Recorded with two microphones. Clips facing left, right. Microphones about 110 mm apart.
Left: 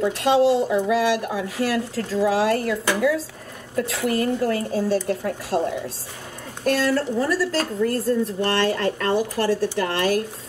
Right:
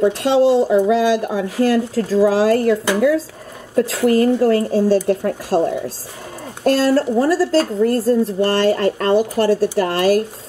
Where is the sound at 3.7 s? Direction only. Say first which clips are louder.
Right 8 dB; 35° right (ahead or behind).